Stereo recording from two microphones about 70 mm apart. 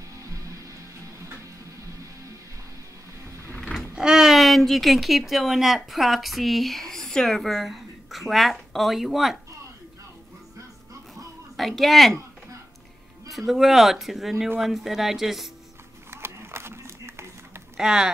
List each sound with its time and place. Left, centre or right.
3.9 s speech: centre
11.5 s speech: centre
13.3 s speech: centre
16.1 s a sound: right
17.7 s speech: centre